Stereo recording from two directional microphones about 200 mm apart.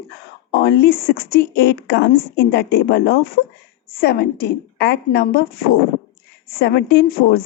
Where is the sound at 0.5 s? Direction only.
55° left (ahead or behind).